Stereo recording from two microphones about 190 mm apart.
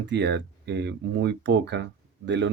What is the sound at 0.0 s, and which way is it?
Speech, 65° right (ahead or behind).